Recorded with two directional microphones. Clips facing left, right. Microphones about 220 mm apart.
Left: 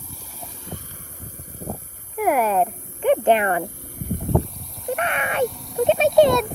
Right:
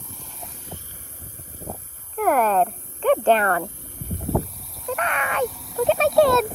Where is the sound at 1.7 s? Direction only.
10° left (ahead or behind).